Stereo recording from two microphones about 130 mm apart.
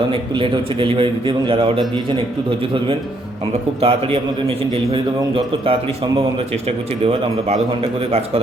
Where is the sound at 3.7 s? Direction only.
45° right (ahead or behind).